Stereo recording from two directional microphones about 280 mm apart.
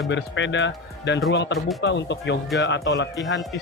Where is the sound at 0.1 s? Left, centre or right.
Left.